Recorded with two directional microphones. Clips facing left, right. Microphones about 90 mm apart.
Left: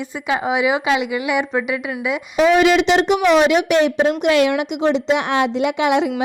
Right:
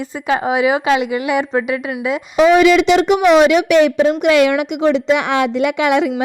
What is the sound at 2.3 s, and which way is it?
Speech, 65° right (ahead or behind).